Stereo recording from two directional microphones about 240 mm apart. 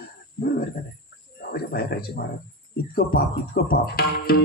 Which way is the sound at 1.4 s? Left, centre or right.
Left.